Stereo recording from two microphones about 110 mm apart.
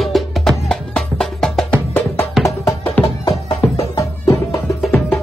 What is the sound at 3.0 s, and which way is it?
Music, 15° left (ahead or behind).